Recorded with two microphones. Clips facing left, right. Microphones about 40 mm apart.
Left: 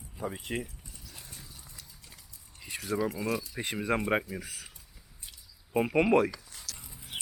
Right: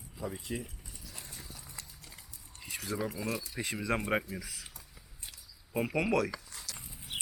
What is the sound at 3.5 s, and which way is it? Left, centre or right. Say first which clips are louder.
Speech: left 2 dB; left.